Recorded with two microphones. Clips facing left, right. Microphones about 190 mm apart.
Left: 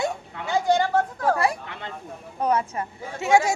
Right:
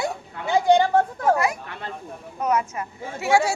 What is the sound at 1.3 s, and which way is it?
A woman's voice, 30° left (ahead or behind).